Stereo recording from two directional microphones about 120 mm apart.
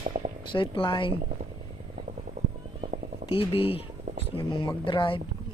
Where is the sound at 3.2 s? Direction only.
50° left (ahead or behind).